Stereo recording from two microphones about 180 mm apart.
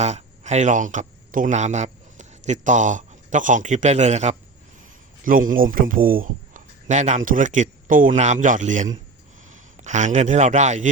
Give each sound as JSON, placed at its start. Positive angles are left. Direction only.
{"t": 0.0, "sound": "a man's voice", "side_deg": -40}